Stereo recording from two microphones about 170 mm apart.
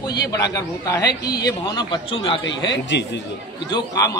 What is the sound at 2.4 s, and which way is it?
Speech, 90° left.